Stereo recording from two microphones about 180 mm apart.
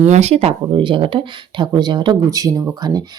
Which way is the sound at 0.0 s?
40° right (ahead or behind).